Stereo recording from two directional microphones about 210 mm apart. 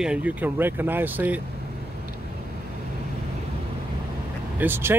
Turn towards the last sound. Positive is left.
turn(degrees=-10)  # may be behind; listen again after turning